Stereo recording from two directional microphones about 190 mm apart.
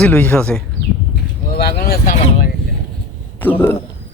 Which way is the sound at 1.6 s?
50° left (ahead or behind).